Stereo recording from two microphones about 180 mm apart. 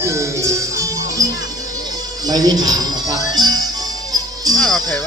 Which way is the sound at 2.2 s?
20° right (ahead or behind).